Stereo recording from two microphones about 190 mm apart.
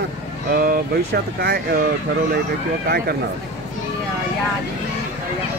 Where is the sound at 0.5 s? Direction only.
50° right (ahead or behind).